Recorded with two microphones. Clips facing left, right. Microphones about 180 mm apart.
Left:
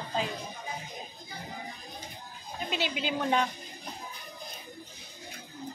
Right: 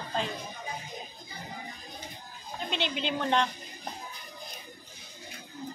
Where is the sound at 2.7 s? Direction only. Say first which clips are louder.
Even; 5° left (ahead or behind).